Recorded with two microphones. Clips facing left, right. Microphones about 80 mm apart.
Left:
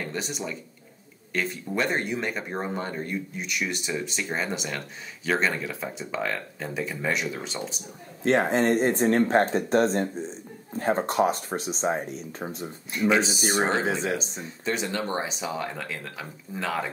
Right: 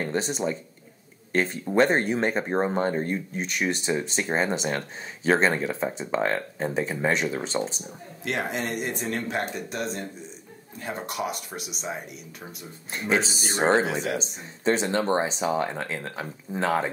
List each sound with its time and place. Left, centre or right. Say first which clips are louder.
0.0 s speech: right 5 dB; right
8.2 s speech: left 7 dB; left
13.1 s speech: even; right